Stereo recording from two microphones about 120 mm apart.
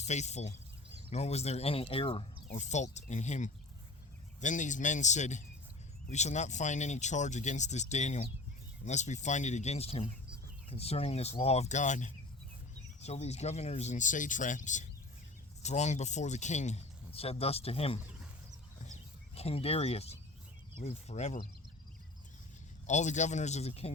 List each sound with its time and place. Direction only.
0.0 s speech: 70° left (ahead or behind); by 2.2 s 50° left (ahead or behind)
2.6 s speech: 75° left (ahead or behind)
4.4 s speech: 90° left
13.0 s speech: 65° left (ahead or behind); by 14.8 s 90° left
15.6 s speech: 70° left (ahead or behind); by 18.0 s 55° left (ahead or behind)
18.9 s a sound: 60° left (ahead or behind)
20.8 s speech: 60° left (ahead or behind)
22.9 s speech: 80° left; by 23.9 s 60° left (ahead or behind)